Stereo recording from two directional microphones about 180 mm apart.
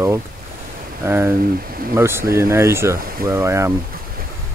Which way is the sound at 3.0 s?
55° right (ahead or behind).